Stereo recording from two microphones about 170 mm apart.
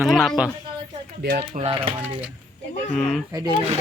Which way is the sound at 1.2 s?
70° right (ahead or behind).